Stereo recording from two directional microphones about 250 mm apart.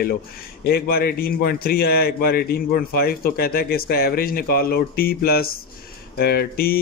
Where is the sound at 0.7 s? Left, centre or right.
Left.